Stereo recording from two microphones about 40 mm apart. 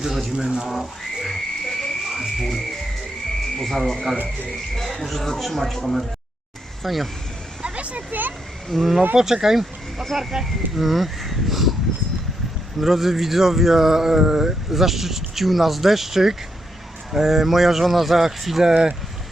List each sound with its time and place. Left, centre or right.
0.0 s speech: centre
0.3 s speech: centre
0.7 s a sound: centre
1.3 s frog: centre
3.6 s speech: centre
7.6 s vehicle: right
8.7 s speech: centre
9.1 s speech: centre
12.8 s speech: centre
18.7 s speech: centre